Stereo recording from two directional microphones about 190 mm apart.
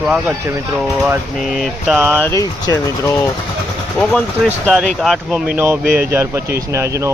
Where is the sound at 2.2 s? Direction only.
15° left (ahead or behind).